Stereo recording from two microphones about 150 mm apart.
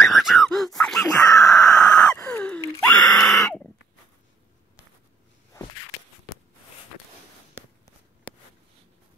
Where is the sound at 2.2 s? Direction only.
10° left (ahead or behind).